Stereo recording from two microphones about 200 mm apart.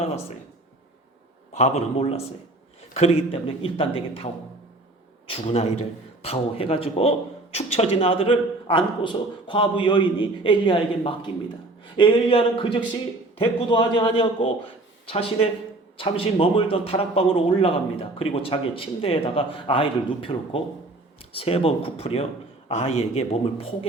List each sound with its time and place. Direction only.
1.5 s a man's voice: 35° left (ahead or behind)